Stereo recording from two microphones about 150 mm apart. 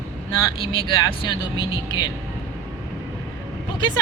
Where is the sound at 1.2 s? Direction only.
30° left (ahead or behind).